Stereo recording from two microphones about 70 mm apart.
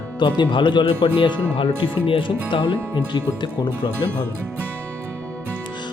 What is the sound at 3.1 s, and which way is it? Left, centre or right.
Speech, left.